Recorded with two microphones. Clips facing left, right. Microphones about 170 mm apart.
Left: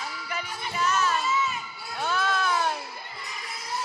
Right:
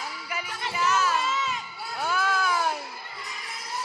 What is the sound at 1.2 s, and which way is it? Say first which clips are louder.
Crowd: left 2 dB; 90° right.